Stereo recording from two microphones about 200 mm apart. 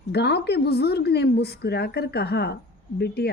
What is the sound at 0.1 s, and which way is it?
A woman's voice, 55° left (ahead or behind).